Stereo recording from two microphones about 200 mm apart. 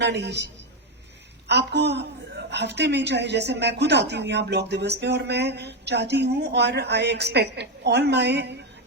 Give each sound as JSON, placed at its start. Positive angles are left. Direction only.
{"t": 0.0, "sound": "a woman's voice", "side_deg": -60}
{"t": 1.5, "sound": "a woman's voice", "side_deg": -55}